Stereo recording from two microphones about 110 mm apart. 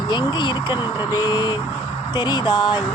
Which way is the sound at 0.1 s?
45° left (ahead or behind).